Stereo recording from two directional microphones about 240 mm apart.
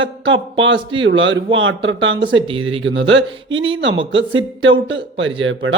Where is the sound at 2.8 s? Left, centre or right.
Right.